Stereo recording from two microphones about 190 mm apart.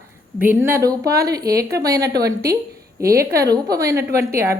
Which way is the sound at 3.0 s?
55° right (ahead or behind).